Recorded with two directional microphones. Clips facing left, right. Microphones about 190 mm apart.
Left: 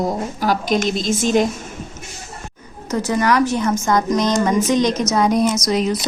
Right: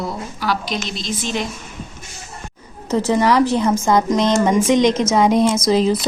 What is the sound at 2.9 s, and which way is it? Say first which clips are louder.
Speech: right 2 dB; 25° right (ahead or behind).